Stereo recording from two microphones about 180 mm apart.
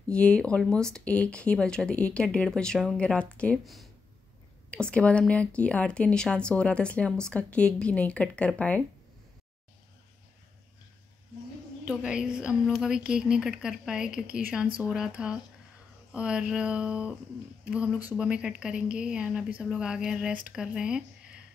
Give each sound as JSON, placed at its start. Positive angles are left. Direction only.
{"t": 0.1, "sound": "speech", "side_deg": 5}
{"t": 11.8, "sound": "speech", "side_deg": -5}